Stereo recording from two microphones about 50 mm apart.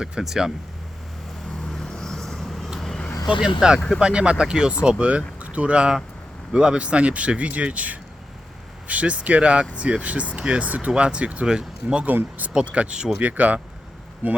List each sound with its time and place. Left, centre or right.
0.0 s speech: centre
1.6 s vehicle: centre
3.2 s speech: centre
6.7 s speech: right
11.4 s speech: centre
12.0 s speech: right
12.7 s speech: right